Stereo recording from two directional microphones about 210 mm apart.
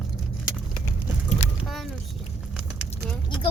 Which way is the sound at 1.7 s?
Centre (ahead or behind).